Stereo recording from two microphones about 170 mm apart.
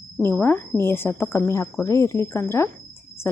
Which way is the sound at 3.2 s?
15° left (ahead or behind).